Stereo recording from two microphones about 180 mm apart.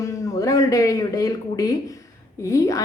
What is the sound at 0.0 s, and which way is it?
A man's voice, 20° left (ahead or behind).